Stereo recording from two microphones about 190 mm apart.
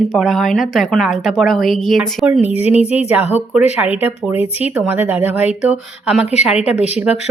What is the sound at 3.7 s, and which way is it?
Speech, 10° right (ahead or behind).